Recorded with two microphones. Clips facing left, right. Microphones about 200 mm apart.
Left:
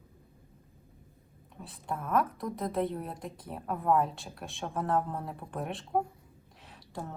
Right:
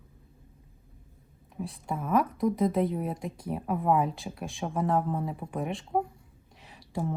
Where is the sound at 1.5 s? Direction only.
Centre (ahead or behind).